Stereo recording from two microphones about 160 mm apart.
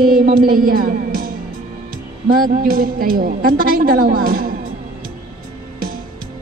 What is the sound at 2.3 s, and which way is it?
A woman's voice, 65° right (ahead or behind).